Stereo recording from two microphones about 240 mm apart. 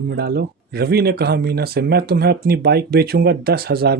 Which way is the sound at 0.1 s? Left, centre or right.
Right.